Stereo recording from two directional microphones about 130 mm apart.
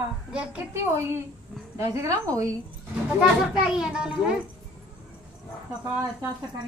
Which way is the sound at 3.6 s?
5° right (ahead or behind).